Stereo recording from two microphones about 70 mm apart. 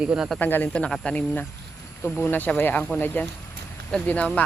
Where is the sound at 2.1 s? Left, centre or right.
Left.